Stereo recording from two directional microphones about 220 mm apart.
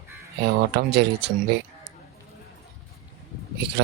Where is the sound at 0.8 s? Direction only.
50° right (ahead or behind).